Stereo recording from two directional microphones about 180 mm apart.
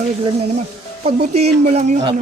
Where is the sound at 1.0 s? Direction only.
35° right (ahead or behind).